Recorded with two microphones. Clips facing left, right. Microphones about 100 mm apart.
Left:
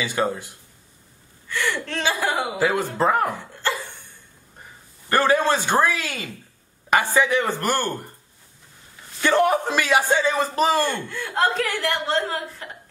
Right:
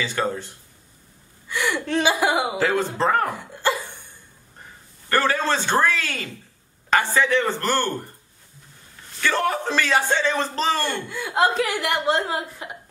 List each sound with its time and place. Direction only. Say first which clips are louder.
0.0 s a man's voice: left 1 dB; 10° left (ahead or behind)
1.5 s speech: right 3 dB; 15° right (ahead or behind)
2.5 s a man's voice: even; 10° left (ahead or behind)
5.1 s a man's voice: left 2 dB; 15° left (ahead or behind)
9.2 s a man's voice: left 4 dB; 15° left (ahead or behind)
11.1 s speech: right 2 dB; 10° right (ahead or behind)